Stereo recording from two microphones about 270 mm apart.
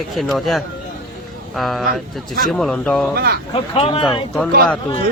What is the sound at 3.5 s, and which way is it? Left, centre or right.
Speech, centre.